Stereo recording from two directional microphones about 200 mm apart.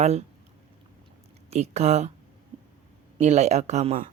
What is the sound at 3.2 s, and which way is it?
Speech, 35° right (ahead or behind).